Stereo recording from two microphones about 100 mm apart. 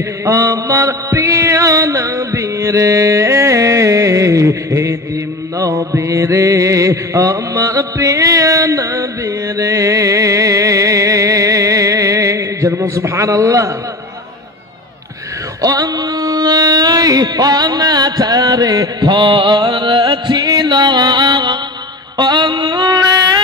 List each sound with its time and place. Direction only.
0.2 s mantra: 30° right (ahead or behind)
15.6 s mantra: 40° right (ahead or behind)
22.1 s music: 45° right (ahead or behind)